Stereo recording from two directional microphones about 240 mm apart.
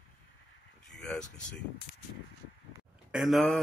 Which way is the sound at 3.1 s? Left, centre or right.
Centre.